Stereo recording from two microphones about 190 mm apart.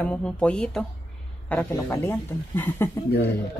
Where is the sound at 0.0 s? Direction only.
5° left (ahead or behind).